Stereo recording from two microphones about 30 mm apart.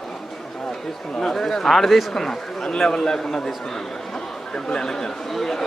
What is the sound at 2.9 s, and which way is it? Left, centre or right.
Speech, centre.